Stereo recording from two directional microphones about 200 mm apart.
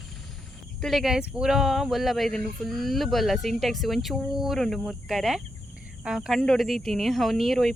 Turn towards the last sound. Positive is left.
turn(degrees=0)  # may be behind; listen again after turning